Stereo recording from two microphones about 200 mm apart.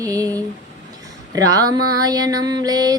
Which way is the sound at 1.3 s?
15° right (ahead or behind).